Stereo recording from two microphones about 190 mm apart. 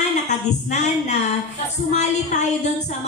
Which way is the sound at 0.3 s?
40° left (ahead or behind).